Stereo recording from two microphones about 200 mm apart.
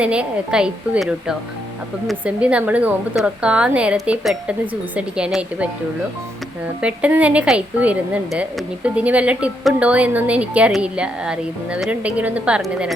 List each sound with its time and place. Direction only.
0.0 s a woman's voice: 5° right (ahead or behind)
6.8 s a woman's voice: 5° right (ahead or behind)